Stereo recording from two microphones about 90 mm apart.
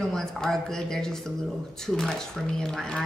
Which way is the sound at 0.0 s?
5° left (ahead or behind).